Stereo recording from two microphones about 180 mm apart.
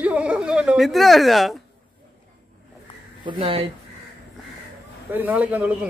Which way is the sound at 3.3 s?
25° right (ahead or behind).